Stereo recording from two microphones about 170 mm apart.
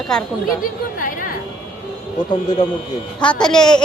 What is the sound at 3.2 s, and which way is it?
Speech, 5° left (ahead or behind).